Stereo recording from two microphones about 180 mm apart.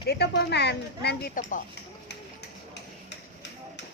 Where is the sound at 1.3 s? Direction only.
45° left (ahead or behind).